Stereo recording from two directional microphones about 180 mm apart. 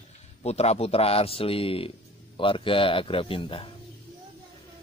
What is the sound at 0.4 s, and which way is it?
A man's voice, 35° left (ahead or behind).